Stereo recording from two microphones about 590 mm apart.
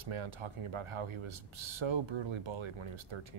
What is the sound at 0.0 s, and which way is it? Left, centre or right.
Speech, right.